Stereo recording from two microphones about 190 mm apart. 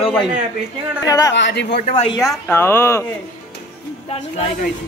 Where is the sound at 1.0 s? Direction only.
20° left (ahead or behind).